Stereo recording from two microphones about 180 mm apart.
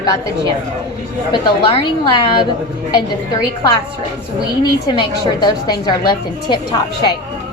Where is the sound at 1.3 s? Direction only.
30° left (ahead or behind).